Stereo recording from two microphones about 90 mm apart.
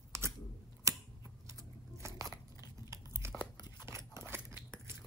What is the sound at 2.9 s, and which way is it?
Crumpling, 30° right (ahead or behind).